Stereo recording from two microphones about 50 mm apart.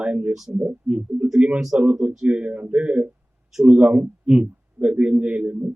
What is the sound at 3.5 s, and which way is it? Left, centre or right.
Speech, centre.